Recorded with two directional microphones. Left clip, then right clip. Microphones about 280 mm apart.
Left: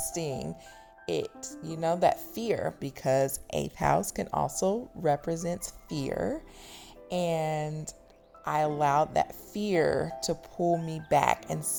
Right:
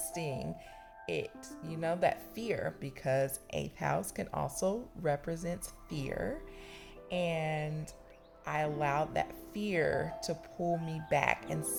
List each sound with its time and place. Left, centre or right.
0.1 s speech: left